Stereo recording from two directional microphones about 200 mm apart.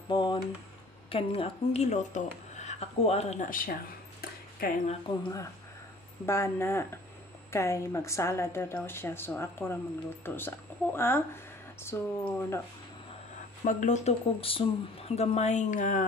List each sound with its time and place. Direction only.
0.1 s a sound: 25° left (ahead or behind)
1.1 s speech: 30° left (ahead or behind); by 4.7 s 45° left (ahead or behind)
6.2 s a woman's voice: 15° left (ahead or behind)
13.7 s speech: 40° left (ahead or behind)